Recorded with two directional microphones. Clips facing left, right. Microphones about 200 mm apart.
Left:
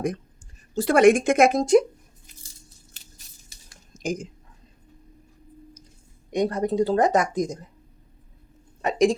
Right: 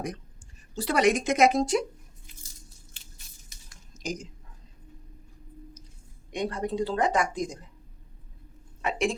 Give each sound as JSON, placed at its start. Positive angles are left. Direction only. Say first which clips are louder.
{"t": 0.8, "sound": "speech", "louder": "left 8 dB", "side_deg": 50}
{"t": 3.9, "sound": "speech", "louder": "left 6 dB", "side_deg": 55}
{"t": 6.3, "sound": "speech", "louder": "left 7 dB", "side_deg": 40}
{"t": 8.8, "sound": "speech", "louder": "left 8 dB", "side_deg": 35}